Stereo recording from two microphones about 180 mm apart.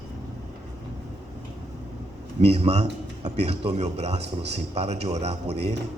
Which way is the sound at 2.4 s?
35° right (ahead or behind).